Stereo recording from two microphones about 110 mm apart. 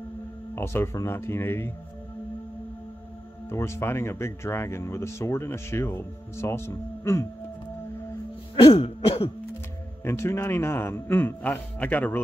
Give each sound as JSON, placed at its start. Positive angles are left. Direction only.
{"t": 0.6, "sound": "speech", "side_deg": 20}
{"t": 3.4, "sound": "speech", "side_deg": 25}
{"t": 8.5, "sound": "throat clearing", "side_deg": 55}
{"t": 10.0, "sound": "speech", "side_deg": 25}